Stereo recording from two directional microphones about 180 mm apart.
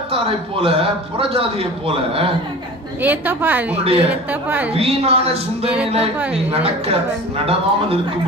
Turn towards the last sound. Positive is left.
turn(degrees=-35)  # may be behind; listen again after turning